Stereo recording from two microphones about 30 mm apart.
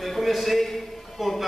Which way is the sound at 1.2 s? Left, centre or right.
Centre.